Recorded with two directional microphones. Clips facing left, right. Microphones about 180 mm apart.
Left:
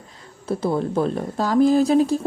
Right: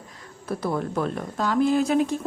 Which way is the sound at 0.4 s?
25° left (ahead or behind).